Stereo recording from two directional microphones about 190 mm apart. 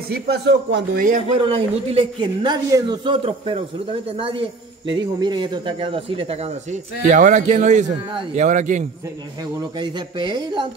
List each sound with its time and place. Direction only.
0.1 s speech: 60° right (ahead or behind)
0.9 s speech: 40° right (ahead or behind)
1.4 s a man's voice: 30° right (ahead or behind)
9.4 s a man's voice: 20° right (ahead or behind)